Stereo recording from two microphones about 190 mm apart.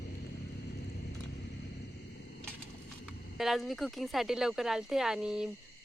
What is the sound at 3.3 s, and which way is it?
Speech, centre (ahead or behind).